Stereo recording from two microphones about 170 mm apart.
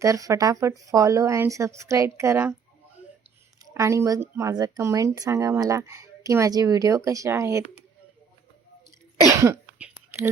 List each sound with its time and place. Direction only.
0.0 s speech: 20° right (ahead or behind)
3.6 s speech: 20° right (ahead or behind)
9.4 s whispering: 10° right (ahead or behind)